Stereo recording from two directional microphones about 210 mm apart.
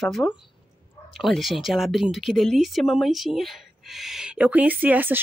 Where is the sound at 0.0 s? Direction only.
Centre (ahead or behind).